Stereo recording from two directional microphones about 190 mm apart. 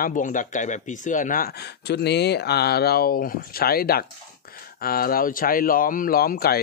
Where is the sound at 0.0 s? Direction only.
45° left (ahead or behind).